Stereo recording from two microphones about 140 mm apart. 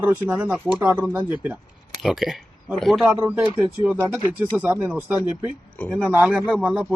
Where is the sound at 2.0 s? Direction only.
Centre (ahead or behind).